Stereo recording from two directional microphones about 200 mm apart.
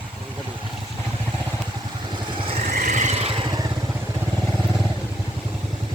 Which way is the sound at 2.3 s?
25° right (ahead or behind).